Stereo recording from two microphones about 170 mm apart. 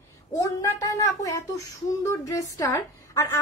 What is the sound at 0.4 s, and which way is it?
A woman's voice, 20° left (ahead or behind).